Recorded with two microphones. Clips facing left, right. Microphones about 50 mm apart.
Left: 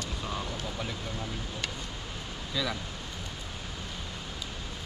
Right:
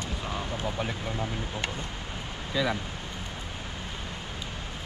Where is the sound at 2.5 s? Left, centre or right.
Right.